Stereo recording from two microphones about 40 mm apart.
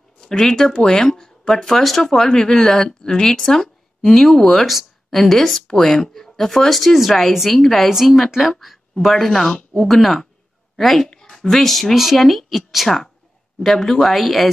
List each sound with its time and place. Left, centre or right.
0.2 s speech: centre
3.4 s a woman's voice: centre